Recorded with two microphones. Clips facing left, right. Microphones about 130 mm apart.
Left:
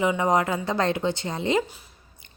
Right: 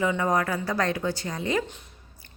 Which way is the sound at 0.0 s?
20° left (ahead or behind).